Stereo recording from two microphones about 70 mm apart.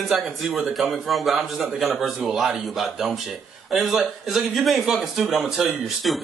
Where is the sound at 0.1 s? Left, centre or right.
Centre.